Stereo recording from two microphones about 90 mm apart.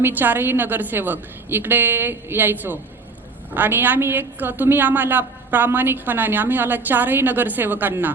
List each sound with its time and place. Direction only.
0.0 s a woman's voice: 20° right (ahead or behind)